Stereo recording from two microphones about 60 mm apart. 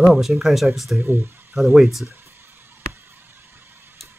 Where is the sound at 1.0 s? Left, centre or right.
Right.